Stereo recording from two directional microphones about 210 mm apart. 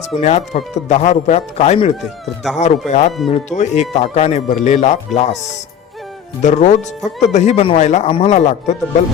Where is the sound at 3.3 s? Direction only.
35° left (ahead or behind).